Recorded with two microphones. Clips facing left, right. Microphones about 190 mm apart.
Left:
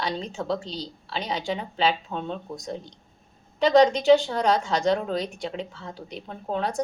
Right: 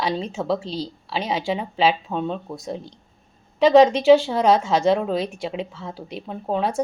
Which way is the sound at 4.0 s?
5° right (ahead or behind).